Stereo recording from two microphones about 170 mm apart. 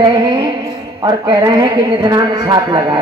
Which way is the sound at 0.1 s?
25° right (ahead or behind).